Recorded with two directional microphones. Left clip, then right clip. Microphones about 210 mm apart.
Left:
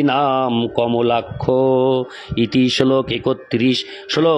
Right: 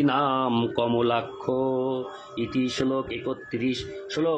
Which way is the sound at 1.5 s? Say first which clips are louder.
Left 11 dB; 45° left (ahead or behind).